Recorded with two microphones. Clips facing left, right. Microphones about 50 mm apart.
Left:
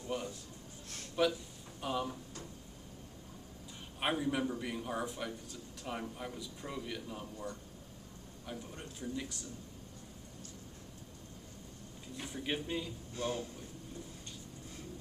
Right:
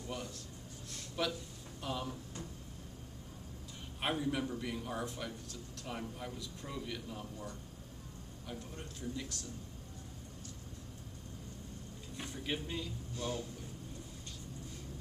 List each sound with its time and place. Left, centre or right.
1.2 s speech: centre
4.0 s speech: centre
12.4 s speech: centre
13.1 s a man's voice: left